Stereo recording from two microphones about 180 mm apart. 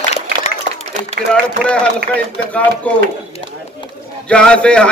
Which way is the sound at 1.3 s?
5° left (ahead or behind).